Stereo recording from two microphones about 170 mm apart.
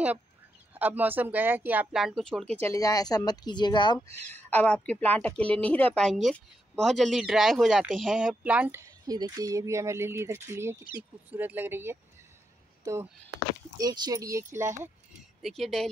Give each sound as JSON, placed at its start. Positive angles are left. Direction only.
{"t": 0.7, "sound": "speech", "side_deg": -10}
{"t": 2.6, "sound": "speech", "side_deg": 20}
{"t": 4.3, "sound": "a woman's voice", "side_deg": 10}
{"t": 9.0, "sound": "speech", "side_deg": -20}
{"t": 15.4, "sound": "speech", "side_deg": 0}